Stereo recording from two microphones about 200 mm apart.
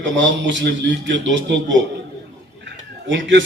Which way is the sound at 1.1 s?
65° right (ahead or behind).